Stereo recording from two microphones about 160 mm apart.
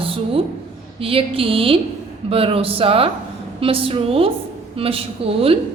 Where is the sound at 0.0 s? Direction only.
35° right (ahead or behind).